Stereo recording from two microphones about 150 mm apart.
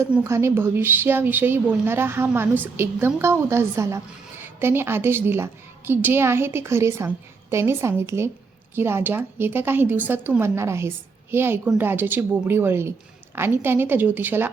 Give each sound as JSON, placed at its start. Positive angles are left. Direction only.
{"t": 0.0, "sound": "a woman's voice", "side_deg": -15}